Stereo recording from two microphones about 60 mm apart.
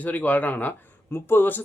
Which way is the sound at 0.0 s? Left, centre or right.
Left.